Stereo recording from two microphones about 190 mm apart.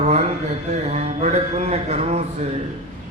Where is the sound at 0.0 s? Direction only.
35° right (ahead or behind).